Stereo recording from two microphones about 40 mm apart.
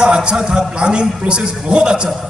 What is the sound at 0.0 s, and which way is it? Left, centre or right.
A man's voice, right.